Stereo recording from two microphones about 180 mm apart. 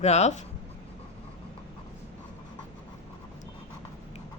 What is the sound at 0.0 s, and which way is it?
Speech, 40° left (ahead or behind).